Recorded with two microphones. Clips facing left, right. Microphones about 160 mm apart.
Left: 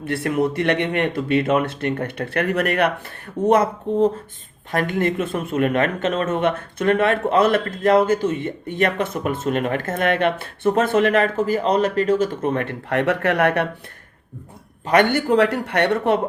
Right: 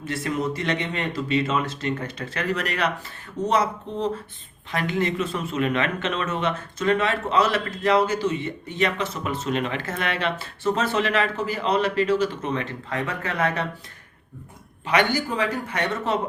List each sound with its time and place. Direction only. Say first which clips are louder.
0.0 s speech: left 6 dB; 60° left (ahead or behind)
14.8 s speech: left 6 dB; 55° left (ahead or behind)